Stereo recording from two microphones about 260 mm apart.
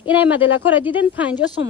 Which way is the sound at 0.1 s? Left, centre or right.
Centre.